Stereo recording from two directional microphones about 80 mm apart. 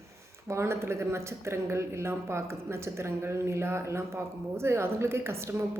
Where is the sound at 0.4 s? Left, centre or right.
Right.